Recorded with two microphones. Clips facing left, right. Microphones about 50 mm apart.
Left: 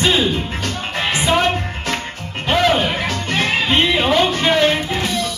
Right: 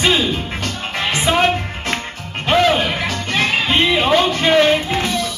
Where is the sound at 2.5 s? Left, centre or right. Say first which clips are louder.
Right 1 dB; centre.